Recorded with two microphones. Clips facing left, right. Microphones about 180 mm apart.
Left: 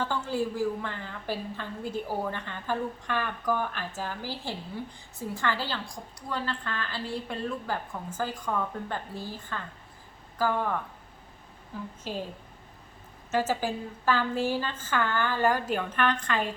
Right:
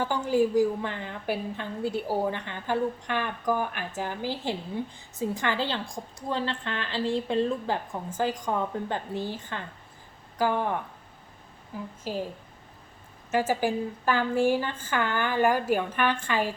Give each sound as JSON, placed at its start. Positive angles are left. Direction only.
{"t": 0.0, "sound": "a woman's voice", "side_deg": -15}
{"t": 13.3, "sound": "a woman's voice", "side_deg": -10}